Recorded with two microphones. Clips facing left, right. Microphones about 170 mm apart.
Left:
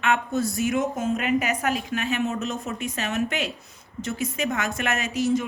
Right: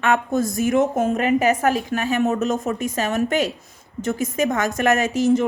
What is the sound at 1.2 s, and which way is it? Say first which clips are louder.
A woman's voice: right 7 dB; 40° right (ahead or behind).